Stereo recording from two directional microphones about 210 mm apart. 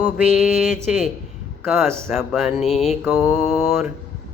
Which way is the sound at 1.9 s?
10° right (ahead or behind).